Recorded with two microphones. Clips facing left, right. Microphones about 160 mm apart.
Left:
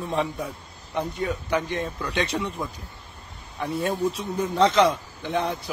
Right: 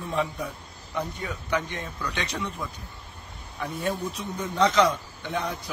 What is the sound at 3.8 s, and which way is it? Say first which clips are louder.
A man's voice: left 3 dB; 30° left (ahead or behind).